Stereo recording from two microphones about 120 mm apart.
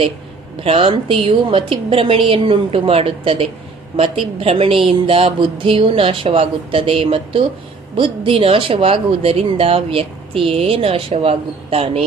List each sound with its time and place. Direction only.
0.6 s a woman's voice: 55° right (ahead or behind)